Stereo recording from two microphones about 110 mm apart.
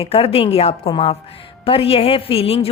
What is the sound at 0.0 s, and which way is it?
Speech, 60° left (ahead or behind).